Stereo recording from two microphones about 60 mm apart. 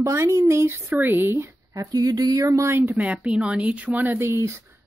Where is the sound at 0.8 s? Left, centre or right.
Right.